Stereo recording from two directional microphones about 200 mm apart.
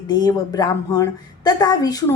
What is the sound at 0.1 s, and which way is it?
A woman's voice, 20° left (ahead or behind).